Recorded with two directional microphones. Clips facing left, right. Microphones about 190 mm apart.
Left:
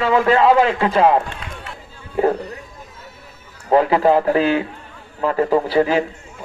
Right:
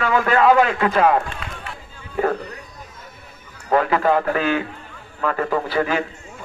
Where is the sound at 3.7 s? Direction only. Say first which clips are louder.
Left 4 dB; 25° left (ahead or behind).